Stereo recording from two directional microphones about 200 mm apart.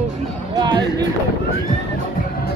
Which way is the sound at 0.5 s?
20° right (ahead or behind).